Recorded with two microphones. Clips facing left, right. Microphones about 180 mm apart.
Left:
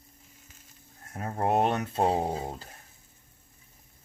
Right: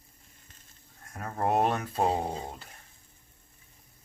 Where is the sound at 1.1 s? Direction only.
25° left (ahead or behind).